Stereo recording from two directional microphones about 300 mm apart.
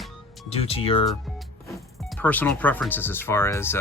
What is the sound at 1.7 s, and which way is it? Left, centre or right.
Speech, centre.